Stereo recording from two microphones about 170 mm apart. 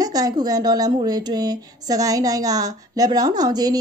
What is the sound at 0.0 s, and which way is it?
A woman's voice, 20° right (ahead or behind).